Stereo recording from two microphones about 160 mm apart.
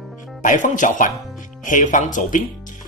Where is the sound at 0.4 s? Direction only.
55° left (ahead or behind).